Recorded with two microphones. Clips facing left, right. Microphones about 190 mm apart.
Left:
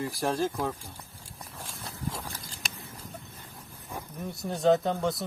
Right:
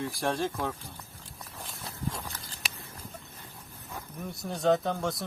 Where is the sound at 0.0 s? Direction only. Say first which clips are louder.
Left 2 dB; centre (ahead or behind).